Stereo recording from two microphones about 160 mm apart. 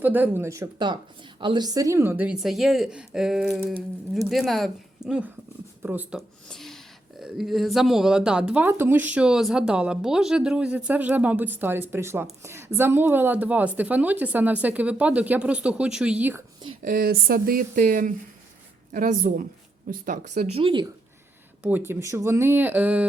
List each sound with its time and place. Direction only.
0.0 s a woman's voice: 10° right (ahead or behind)
6.1 s a woman's voice: centre (ahead or behind)
16.8 s speech: 65° right (ahead or behind)
20.6 s speech: 30° right (ahead or behind)
21.6 s speech: 15° right (ahead or behind)